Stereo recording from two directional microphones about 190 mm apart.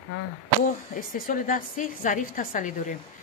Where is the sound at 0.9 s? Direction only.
45° left (ahead or behind).